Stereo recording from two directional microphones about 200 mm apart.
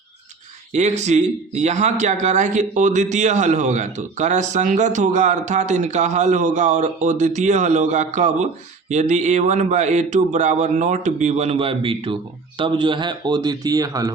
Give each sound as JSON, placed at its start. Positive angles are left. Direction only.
{"t": 0.7, "sound": "speech", "side_deg": -35}